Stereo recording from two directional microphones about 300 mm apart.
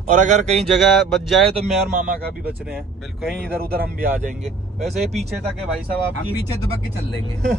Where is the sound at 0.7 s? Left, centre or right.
Centre.